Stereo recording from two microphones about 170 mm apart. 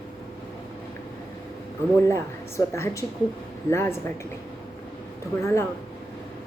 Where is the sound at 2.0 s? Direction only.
15° left (ahead or behind).